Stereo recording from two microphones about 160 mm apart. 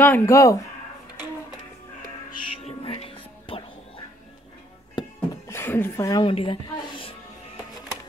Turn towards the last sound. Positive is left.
turn(degrees=25)  # may be behind; listen again after turning